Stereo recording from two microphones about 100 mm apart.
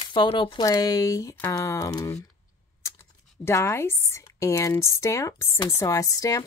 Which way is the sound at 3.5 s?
25° left (ahead or behind).